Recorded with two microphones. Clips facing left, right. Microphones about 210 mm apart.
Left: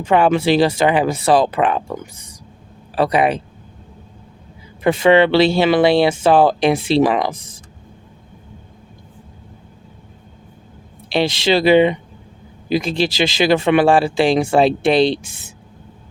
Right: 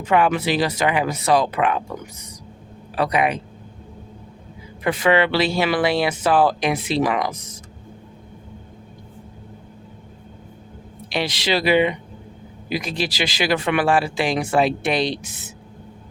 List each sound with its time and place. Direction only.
0.0 s a man's voice: 30° left (ahead or behind)
4.8 s speech: 25° left (ahead or behind)
11.1 s speech: 25° left (ahead or behind)